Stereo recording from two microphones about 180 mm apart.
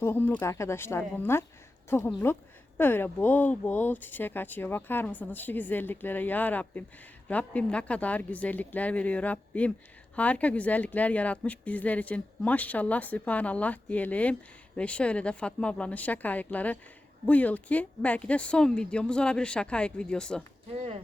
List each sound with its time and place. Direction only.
0.0 s speech: 10° left (ahead or behind)
20.7 s speech: 35° right (ahead or behind)